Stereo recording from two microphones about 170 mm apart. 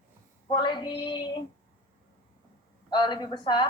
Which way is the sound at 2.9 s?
25° left (ahead or behind).